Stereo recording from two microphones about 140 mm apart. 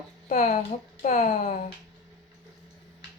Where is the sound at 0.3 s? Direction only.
60° left (ahead or behind).